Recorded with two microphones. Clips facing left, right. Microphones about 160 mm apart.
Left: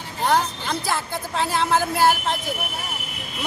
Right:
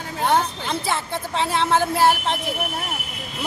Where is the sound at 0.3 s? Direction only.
Centre (ahead or behind).